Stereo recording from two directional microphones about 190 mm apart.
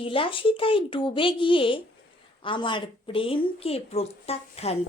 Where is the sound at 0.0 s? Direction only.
25° left (ahead or behind).